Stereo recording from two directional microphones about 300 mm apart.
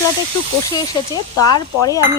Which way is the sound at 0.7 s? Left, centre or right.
Centre.